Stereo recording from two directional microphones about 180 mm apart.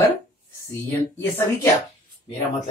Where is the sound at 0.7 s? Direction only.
15° left (ahead or behind).